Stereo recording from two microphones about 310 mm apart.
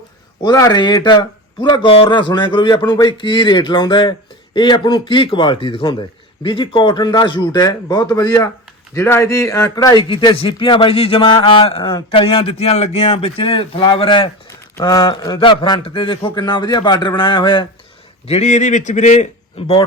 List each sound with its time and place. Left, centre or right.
0.4 s a man's voice: centre